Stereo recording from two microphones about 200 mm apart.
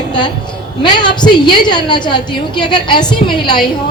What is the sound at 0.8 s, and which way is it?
A woman's voice, 20° left (ahead or behind).